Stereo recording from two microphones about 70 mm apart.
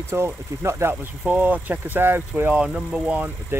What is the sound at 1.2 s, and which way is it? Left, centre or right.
Speech, right.